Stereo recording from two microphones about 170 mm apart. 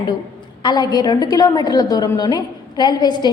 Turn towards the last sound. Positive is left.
turn(degrees=25)  # may be behind; listen again after turning